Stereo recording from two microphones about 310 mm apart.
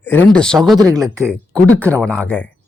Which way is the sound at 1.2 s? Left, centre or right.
Centre.